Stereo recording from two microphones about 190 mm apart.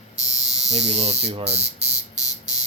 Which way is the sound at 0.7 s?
35° right (ahead or behind).